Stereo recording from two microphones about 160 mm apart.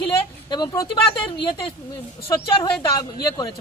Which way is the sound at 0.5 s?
25° left (ahead or behind).